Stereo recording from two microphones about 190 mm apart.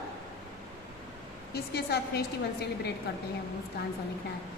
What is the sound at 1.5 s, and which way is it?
A woman's voice, 55° left (ahead or behind).